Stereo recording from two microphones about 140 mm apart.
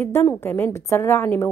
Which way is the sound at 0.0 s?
20° left (ahead or behind).